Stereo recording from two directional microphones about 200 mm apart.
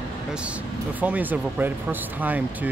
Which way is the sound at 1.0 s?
10° right (ahead or behind).